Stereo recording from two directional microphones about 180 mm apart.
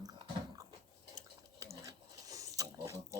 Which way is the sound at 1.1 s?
20° right (ahead or behind).